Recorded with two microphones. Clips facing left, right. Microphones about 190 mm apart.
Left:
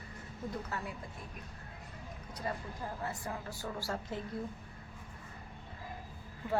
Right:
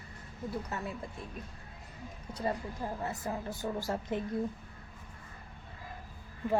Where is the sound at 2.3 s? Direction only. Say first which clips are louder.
Right 5 dB; 25° right (ahead or behind).